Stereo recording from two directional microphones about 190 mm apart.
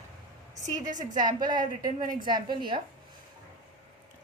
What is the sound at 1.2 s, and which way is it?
A woman's voice, 25° right (ahead or behind).